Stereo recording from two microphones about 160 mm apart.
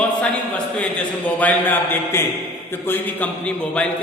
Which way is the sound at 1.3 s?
10° left (ahead or behind).